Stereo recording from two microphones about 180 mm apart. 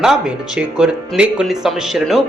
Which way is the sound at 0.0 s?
5° right (ahead or behind).